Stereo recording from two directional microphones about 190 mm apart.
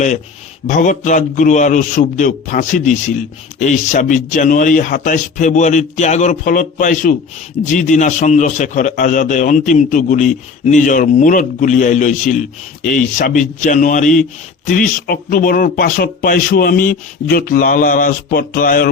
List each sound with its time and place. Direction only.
0.7 s a man's voice: 40° left (ahead or behind)